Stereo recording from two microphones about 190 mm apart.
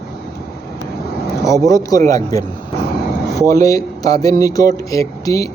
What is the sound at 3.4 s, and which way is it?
Speech, 15° left (ahead or behind).